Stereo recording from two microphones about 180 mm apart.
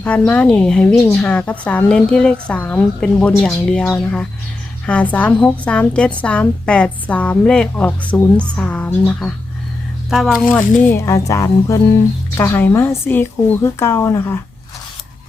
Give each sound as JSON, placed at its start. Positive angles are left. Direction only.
{"t": 0.3, "sound": "a woman's voice", "side_deg": 5}
{"t": 10.5, "sound": "a woman's voice", "side_deg": 10}